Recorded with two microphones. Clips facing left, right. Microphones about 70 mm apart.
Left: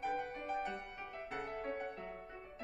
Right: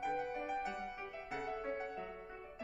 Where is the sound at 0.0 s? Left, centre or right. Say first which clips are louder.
Right 1 dB; centre.